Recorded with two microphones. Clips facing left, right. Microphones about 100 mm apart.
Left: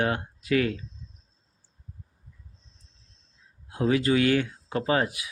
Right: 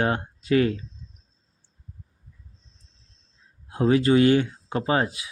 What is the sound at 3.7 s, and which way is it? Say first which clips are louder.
Speech: right 4 dB; 30° right (ahead or behind).